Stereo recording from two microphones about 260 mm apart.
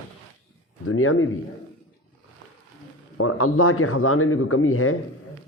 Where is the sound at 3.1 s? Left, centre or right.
Left.